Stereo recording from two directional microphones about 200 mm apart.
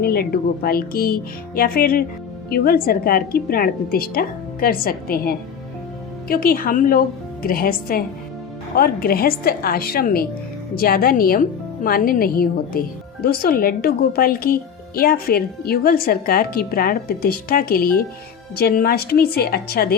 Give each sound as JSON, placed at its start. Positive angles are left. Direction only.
{"t": 0.0, "sound": "a woman's voice", "side_deg": 50}